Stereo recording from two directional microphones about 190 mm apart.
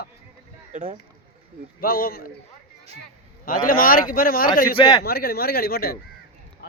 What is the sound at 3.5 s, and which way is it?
Speech, 50° left (ahead or behind).